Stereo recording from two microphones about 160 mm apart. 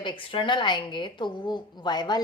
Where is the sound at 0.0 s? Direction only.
30° left (ahead or behind).